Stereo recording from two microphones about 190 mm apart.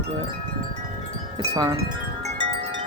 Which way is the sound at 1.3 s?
20° right (ahead or behind).